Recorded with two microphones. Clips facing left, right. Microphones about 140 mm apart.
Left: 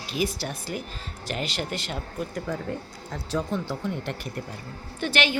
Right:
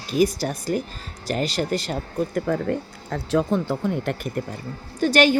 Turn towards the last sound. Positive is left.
turn(degrees=-40)  # may be behind; listen again after turning